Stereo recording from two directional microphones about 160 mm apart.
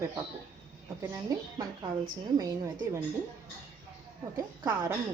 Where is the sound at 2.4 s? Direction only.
20° right (ahead or behind).